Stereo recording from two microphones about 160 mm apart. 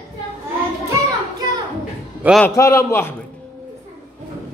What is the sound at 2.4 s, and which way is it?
Speech, 20° left (ahead or behind).